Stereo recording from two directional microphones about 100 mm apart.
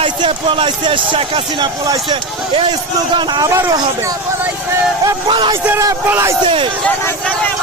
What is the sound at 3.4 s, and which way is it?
Speech, 30° right (ahead or behind).